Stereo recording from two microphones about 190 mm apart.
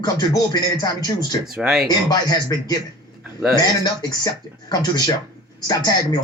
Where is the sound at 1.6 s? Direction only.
Centre (ahead or behind).